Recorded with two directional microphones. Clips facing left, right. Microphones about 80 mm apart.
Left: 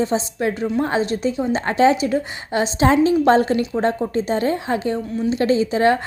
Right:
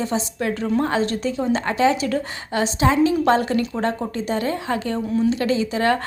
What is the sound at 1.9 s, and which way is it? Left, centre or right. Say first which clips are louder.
A woman's voice: left 3 dB; left.